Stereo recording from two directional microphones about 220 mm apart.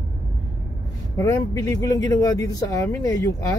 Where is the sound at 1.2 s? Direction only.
15° left (ahead or behind).